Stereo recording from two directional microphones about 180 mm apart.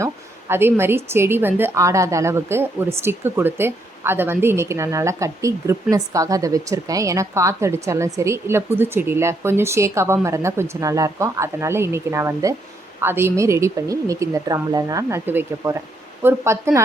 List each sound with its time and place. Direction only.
0.0 s a woman's voice: 15° right (ahead or behind)